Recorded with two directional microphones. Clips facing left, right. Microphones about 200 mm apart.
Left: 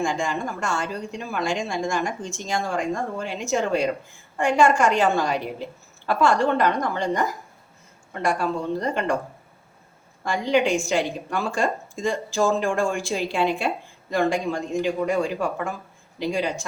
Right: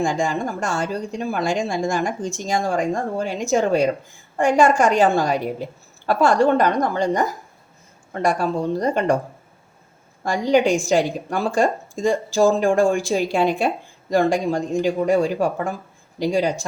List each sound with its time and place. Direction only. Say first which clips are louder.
0.0 s a woman's voice: right 4 dB; 40° right (ahead or behind)
10.2 s a woman's voice: right 4 dB; 40° right (ahead or behind)